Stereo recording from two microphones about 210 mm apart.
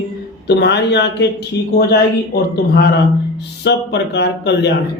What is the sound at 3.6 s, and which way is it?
A man's voice, 55° left (ahead or behind).